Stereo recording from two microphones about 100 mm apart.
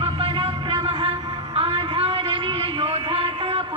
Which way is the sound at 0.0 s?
65° right (ahead or behind).